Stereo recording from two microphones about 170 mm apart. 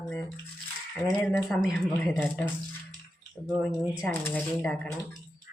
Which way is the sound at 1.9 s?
10° left (ahead or behind).